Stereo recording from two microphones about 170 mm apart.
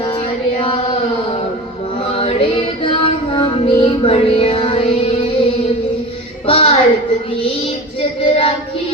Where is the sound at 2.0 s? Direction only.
35° left (ahead or behind).